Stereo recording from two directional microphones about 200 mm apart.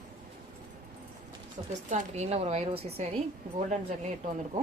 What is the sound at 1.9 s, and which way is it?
Speech, 35° right (ahead or behind).